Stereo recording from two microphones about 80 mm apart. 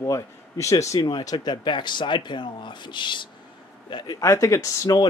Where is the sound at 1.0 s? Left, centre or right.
Left.